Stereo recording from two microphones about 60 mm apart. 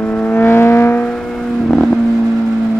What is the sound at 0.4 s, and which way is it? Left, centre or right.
Vehicle, left.